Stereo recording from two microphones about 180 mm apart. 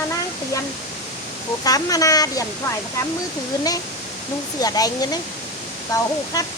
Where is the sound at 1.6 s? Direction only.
20° left (ahead or behind).